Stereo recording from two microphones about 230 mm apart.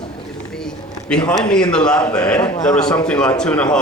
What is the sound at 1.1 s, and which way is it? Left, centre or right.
Speech, centre.